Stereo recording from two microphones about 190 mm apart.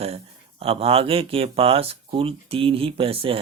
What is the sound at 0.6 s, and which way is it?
Speech, 30° right (ahead or behind).